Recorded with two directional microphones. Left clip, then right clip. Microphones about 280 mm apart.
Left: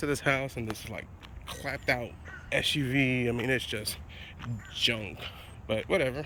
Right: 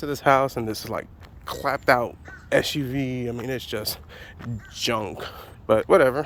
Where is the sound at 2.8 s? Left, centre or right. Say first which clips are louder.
Even; centre.